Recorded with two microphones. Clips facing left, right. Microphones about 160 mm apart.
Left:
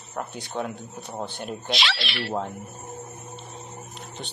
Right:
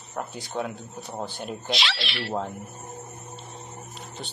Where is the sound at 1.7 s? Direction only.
60° left (ahead or behind).